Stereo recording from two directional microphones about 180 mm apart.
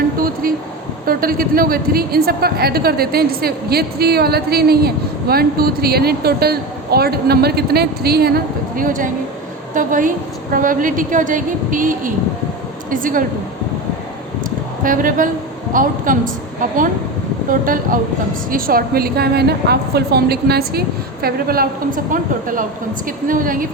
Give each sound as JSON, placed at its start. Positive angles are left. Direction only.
{"t": 1.0, "sound": "a woman's voice", "side_deg": -55}
{"t": 14.8, "sound": "a woman's voice", "side_deg": -50}